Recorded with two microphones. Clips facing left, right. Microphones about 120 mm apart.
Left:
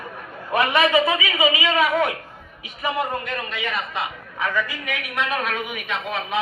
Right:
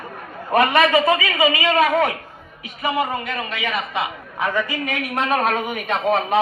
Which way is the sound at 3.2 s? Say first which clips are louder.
Right 2 dB; 90° right.